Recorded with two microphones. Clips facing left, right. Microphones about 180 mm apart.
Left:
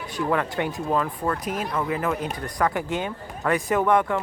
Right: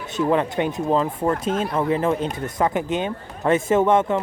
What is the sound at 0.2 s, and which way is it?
Speech, 20° right (ahead or behind).